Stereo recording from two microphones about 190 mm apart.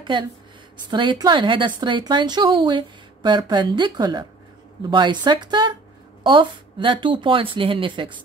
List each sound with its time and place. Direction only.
0.0 s speech: 25° right (ahead or behind)